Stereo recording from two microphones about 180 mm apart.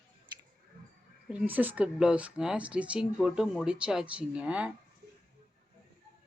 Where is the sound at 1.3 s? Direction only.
10° right (ahead or behind).